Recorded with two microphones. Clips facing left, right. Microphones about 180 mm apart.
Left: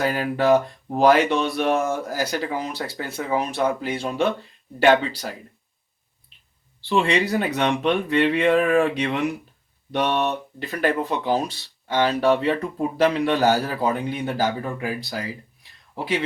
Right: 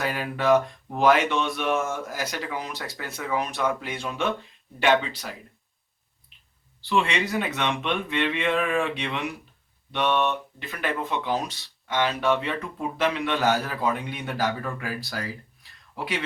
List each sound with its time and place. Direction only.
0.0 s speech: 35° left (ahead or behind)
6.8 s speech: 35° left (ahead or behind)